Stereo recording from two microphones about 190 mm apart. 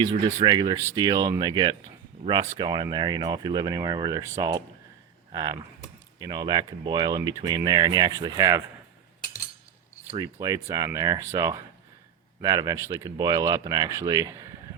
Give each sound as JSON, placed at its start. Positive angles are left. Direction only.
{"t": 0.4, "sound": "speech", "side_deg": -25}
{"t": 10.4, "sound": "speech", "side_deg": -20}